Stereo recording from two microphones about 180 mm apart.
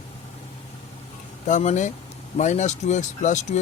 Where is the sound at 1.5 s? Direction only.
40° left (ahead or behind).